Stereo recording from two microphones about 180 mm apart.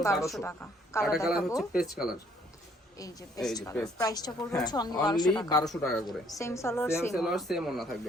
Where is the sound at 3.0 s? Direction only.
20° left (ahead or behind).